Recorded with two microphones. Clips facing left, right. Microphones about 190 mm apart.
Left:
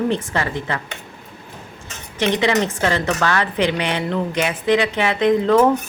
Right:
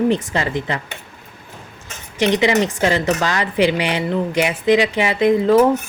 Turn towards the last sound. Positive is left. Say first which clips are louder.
# right 1 dB
turn(degrees=-10)  # may be behind; listen again after turning